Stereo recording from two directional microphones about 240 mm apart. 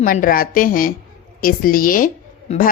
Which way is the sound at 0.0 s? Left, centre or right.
Left.